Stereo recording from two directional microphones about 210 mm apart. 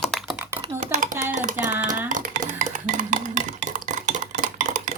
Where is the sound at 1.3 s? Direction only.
40° right (ahead or behind).